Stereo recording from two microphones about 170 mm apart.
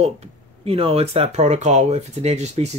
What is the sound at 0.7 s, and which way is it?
Speech, 35° right (ahead or behind).